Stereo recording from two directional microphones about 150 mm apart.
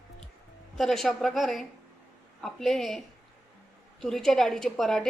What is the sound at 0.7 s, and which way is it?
A woman's voice, centre (ahead or behind).